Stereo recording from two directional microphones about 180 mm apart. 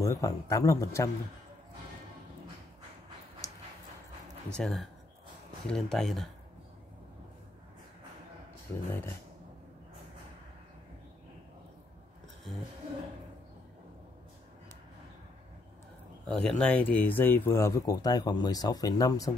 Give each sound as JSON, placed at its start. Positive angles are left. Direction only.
{"t": 0.0, "sound": "speech", "side_deg": 20}
{"t": 3.4, "sound": "a sound", "side_deg": 20}
{"t": 4.5, "sound": "speech", "side_deg": 5}
{"t": 8.7, "sound": "speech", "side_deg": 15}
{"t": 16.3, "sound": "speech", "side_deg": 5}